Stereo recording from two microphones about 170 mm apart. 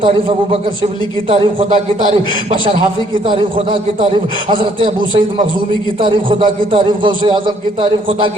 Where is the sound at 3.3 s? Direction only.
30° right (ahead or behind).